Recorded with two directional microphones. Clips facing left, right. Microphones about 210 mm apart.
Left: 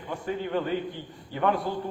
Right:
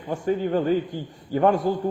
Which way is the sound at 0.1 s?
45° right (ahead or behind).